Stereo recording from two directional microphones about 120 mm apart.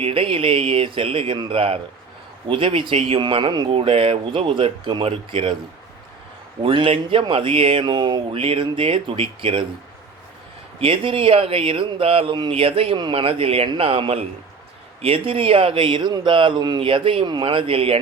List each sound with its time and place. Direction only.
0.0 s speech: 50° right (ahead or behind)
6.6 s speech: 50° right (ahead or behind)
10.8 s speech: 50° right (ahead or behind)